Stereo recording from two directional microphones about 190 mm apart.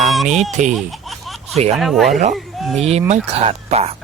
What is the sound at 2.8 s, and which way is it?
Speech, 35° right (ahead or behind).